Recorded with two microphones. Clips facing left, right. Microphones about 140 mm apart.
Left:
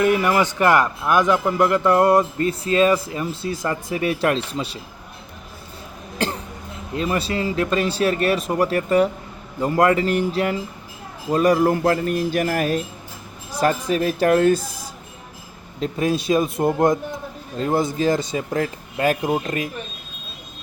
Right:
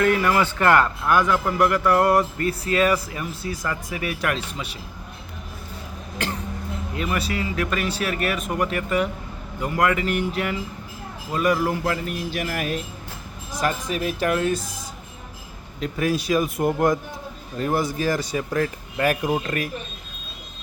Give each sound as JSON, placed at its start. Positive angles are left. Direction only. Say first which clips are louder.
{"t": 0.0, "sound": "a man's voice", "louder": "left 2 dB", "side_deg": 15}
{"t": 6.2, "sound": "a man's voice", "louder": "left 3 dB", "side_deg": 30}
{"t": 15.8, "sound": "a man's voice", "louder": "left 2 dB", "side_deg": 25}